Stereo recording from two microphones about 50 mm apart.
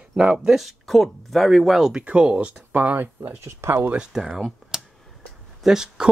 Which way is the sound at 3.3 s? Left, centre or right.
Right.